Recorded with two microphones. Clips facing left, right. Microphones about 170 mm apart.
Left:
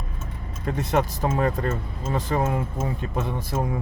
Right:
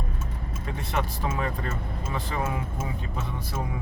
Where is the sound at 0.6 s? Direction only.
40° left (ahead or behind).